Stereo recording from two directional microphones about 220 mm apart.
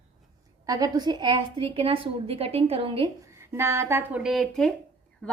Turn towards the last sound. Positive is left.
turn(degrees=5)  # may be behind; listen again after turning